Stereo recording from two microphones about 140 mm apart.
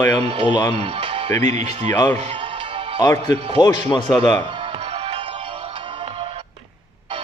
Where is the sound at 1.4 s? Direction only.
55° right (ahead or behind).